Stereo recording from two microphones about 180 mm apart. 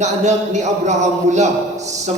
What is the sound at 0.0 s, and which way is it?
A man's voice, 40° right (ahead or behind).